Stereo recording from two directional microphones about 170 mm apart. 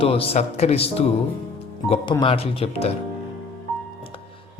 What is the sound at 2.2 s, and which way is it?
Speech, 35° left (ahead or behind).